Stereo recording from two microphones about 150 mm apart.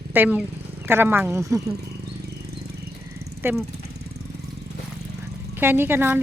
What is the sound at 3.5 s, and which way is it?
Speech, 10° right (ahead or behind).